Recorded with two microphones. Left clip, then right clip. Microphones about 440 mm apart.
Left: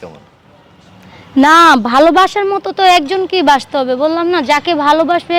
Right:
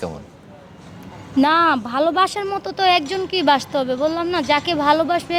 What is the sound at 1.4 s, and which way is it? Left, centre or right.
Speech, left.